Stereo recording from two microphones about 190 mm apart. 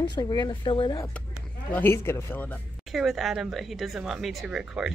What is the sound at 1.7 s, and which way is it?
Speech, 10° left (ahead or behind).